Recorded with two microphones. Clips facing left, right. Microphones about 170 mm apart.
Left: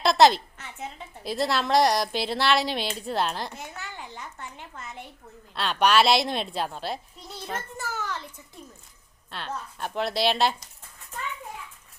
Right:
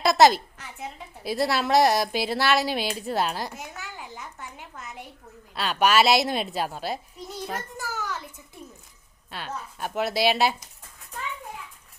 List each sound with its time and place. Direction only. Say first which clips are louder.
0.0 s a woman's voice: right 1 dB; 5° right (ahead or behind)
7.9 s a sound: even; centre (ahead or behind)
9.3 s a woman's voice: even; 5° right (ahead or behind)